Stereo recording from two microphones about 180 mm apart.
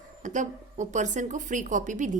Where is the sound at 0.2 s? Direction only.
45° right (ahead or behind).